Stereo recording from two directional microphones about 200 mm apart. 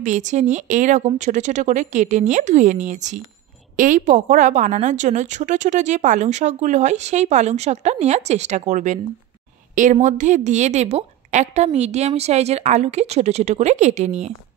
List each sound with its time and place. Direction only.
0.0 s a woman's voice: 35° right (ahead or behind)